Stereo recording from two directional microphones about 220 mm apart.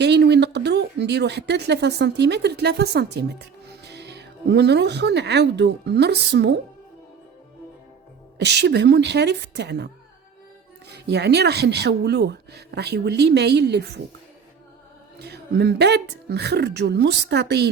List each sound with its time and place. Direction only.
0.0 s speech: 50° right (ahead or behind)
8.4 s speech: 50° right (ahead or behind)
10.9 s speech: 50° right (ahead or behind)
15.2 s speech: 50° right (ahead or behind)